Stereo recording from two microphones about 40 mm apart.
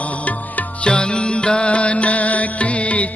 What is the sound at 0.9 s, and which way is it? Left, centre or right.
Music, left.